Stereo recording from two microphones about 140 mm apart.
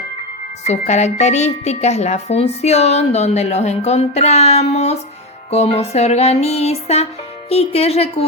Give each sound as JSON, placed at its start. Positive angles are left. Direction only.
{"t": 0.6, "sound": "a woman's voice", "side_deg": 55}